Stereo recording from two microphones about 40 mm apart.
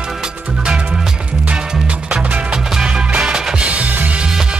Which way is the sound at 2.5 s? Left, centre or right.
Right.